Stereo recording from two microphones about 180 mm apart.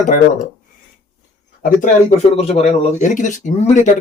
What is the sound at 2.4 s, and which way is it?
Speech, 35° left (ahead or behind).